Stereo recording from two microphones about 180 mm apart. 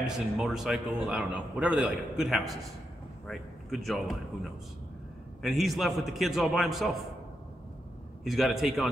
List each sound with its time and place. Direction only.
0.0 s a man's voice: centre (ahead or behind)
8.2 s a man's voice: centre (ahead or behind)